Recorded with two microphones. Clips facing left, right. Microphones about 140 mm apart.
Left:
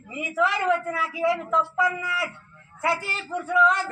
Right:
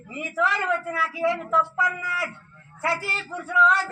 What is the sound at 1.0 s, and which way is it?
Speech, 20° left (ahead or behind).